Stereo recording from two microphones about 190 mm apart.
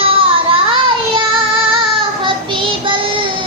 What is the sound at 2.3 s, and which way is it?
Child singing, 25° right (ahead or behind).